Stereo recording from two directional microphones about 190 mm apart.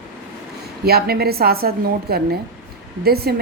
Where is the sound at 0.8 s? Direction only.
55° right (ahead or behind).